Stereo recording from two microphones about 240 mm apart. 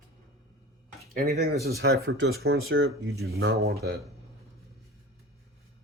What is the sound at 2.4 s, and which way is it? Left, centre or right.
Speech, right.